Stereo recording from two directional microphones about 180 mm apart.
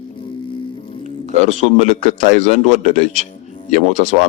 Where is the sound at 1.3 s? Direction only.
45° right (ahead or behind).